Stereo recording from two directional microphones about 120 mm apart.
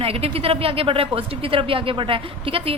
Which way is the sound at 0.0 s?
55° right (ahead or behind).